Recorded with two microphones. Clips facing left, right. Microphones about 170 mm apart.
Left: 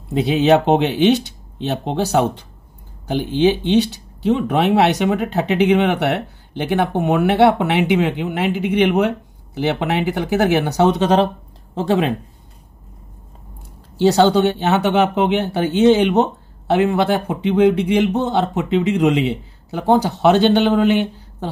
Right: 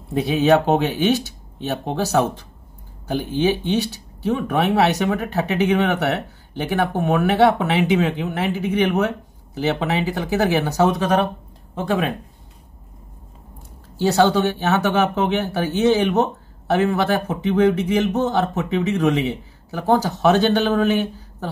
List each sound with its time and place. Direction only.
0.1 s speech: 20° left (ahead or behind)
13.9 s speech: 20° left (ahead or behind)